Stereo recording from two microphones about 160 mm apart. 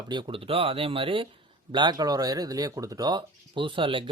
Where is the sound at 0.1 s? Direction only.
30° right (ahead or behind).